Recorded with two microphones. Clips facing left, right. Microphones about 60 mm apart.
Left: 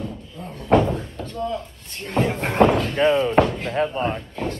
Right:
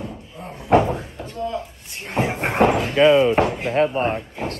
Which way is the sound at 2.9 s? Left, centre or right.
Right.